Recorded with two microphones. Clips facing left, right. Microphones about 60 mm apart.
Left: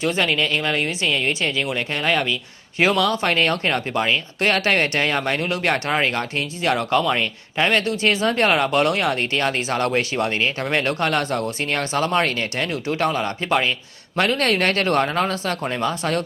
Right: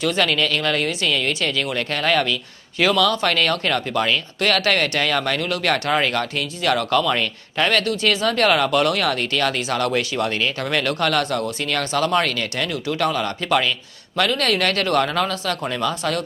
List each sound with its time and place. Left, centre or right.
0.0 s speech: left